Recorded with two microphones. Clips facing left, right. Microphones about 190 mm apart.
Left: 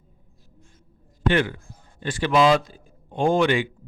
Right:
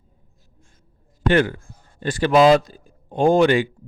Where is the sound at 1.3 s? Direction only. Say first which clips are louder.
Right 4 dB; 40° right (ahead or behind).